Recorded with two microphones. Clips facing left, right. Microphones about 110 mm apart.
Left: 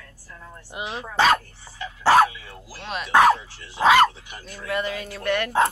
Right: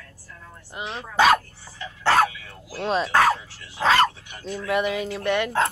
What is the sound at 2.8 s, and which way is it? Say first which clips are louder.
Speech: right 8 dB; 30° right (ahead or behind).